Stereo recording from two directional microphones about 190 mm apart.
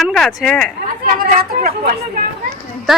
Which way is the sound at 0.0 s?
Centre (ahead or behind).